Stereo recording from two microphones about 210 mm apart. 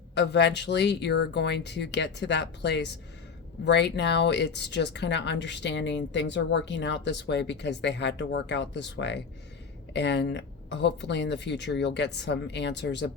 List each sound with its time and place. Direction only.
0.1 s speech: 55° left (ahead or behind)